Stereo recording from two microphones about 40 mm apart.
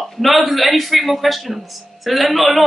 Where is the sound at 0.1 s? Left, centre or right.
Centre.